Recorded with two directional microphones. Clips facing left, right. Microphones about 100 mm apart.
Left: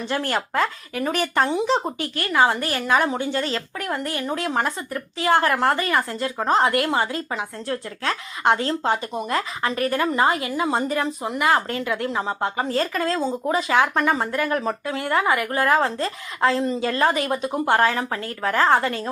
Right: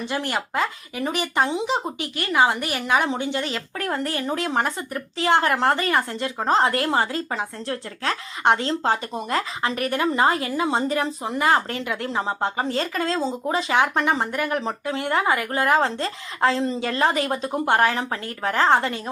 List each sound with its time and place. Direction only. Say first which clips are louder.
0.0 s speech: left 2 dB; 15° right (ahead or behind)
3.8 s speech: right 5 dB; 30° right (ahead or behind)
9.7 s a woman's voice: left 4 dB; 30° left (ahead or behind)
10.0 s speech: right 2 dB; 25° right (ahead or behind)